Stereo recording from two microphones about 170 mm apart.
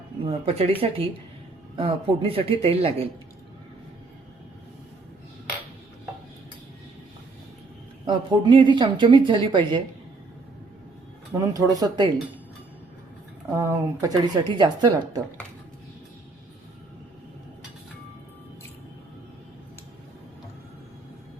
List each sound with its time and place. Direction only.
0.3 s speech: 35° right (ahead or behind)
8.0 s a woman's voice: 30° right (ahead or behind)
11.3 s a woman's voice: 20° right (ahead or behind)
13.6 s a woman's voice: 20° right (ahead or behind)